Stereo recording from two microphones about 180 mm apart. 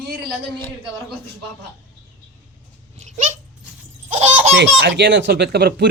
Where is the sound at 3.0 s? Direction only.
45° right (ahead or behind).